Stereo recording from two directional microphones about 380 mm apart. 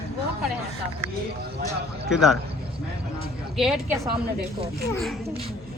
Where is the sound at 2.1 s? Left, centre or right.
Centre.